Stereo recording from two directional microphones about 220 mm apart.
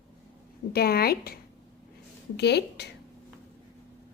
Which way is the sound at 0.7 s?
45° left (ahead or behind).